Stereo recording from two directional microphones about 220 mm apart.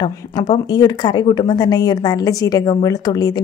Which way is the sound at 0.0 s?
20° left (ahead or behind).